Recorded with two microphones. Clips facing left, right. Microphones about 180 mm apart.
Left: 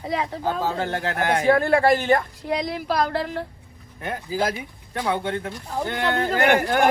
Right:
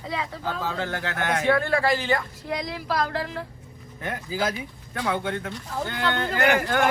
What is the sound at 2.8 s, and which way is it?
Speech, 35° left (ahead or behind).